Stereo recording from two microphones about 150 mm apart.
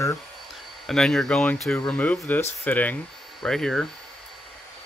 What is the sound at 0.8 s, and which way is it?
Speech, 5° left (ahead or behind).